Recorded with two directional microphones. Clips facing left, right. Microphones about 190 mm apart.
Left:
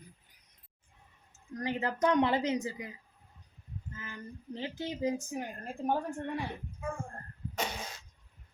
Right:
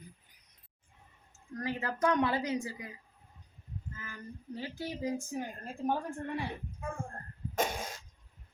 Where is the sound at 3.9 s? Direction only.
20° left (ahead or behind).